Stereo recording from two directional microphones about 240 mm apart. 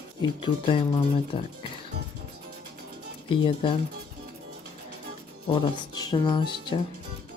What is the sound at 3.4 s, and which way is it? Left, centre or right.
Speech, left.